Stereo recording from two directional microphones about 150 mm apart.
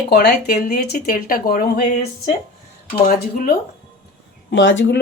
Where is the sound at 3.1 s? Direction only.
75° left (ahead or behind).